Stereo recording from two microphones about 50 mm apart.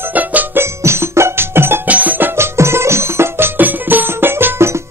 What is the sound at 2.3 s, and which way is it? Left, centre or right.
Music, right.